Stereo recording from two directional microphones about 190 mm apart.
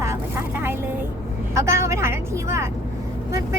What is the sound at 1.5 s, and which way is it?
A woman's voice, 15° right (ahead or behind).